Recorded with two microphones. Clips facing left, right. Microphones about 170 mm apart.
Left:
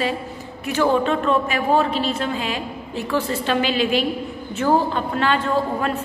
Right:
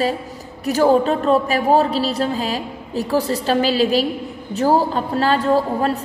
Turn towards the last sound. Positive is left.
turn(degrees=-35)  # may be behind; listen again after turning